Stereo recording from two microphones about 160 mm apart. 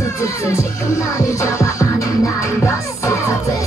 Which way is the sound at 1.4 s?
20° left (ahead or behind).